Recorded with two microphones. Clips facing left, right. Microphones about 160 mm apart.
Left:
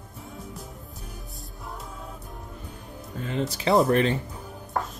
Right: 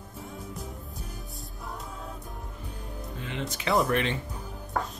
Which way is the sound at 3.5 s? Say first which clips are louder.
Left 5 dB; 30° left (ahead or behind).